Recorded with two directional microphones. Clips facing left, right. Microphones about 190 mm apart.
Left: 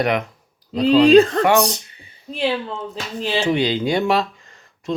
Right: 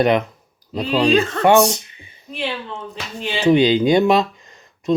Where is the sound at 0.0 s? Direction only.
25° right (ahead or behind).